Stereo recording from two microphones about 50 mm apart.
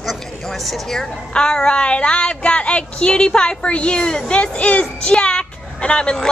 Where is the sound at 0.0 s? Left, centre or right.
Centre.